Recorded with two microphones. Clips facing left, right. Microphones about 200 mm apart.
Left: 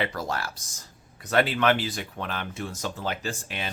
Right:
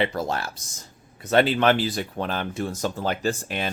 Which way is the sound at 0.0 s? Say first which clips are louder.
Right 4 dB; 25° right (ahead or behind).